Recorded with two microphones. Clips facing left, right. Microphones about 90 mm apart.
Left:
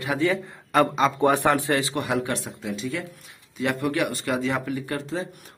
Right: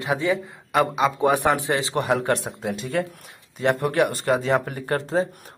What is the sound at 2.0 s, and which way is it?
Speech, 40° right (ahead or behind).